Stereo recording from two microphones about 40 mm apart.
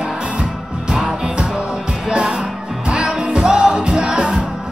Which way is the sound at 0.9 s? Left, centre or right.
Centre.